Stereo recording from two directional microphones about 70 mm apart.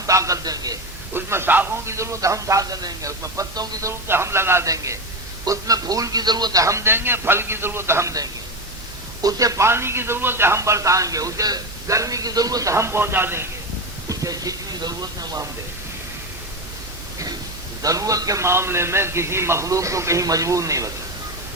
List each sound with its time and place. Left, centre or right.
0.0 s a sound: right
1.1 s a man's voice: right
3.8 s a man's voice: right
4.6 s a man's voice: right
6.6 s a man's voice: right
9.2 s a man's voice: right
9.6 s a man's voice: right
12.7 s a man's voice: right
14.1 s speech: right
17.8 s speech: right
18.4 s a man's voice: right